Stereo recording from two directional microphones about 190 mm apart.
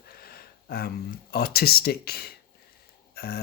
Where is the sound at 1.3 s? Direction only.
55° left (ahead or behind).